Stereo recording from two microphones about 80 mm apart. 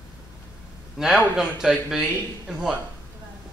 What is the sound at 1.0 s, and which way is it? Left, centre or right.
A man's voice, centre.